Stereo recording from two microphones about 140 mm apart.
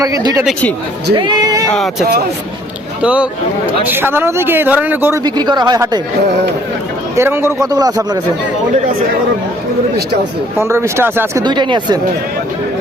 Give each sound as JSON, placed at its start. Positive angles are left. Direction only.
{"t": 0.0, "sound": "a man's voice", "side_deg": -25}
{"t": 1.7, "sound": "speech", "side_deg": 0}
{"t": 5.2, "sound": "a man's voice", "side_deg": -30}
{"t": 7.2, "sound": "a man's voice", "side_deg": -15}
{"t": 10.6, "sound": "a man's voice", "side_deg": -20}
{"t": 11.4, "sound": "speech", "side_deg": -35}